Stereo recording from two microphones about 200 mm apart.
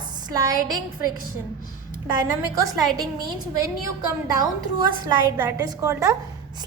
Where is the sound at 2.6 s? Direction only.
20° right (ahead or behind).